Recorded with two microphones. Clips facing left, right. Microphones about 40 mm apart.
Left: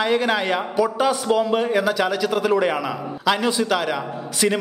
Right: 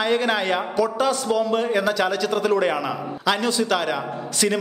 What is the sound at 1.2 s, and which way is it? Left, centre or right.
Speech, left.